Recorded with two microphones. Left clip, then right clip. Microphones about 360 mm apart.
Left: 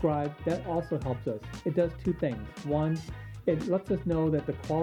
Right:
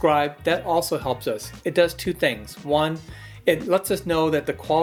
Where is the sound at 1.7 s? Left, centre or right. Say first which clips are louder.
Right 9 dB; centre.